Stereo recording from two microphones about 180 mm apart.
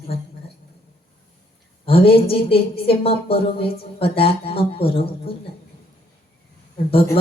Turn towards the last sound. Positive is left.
turn(degrees=30)  # may be behind; listen again after turning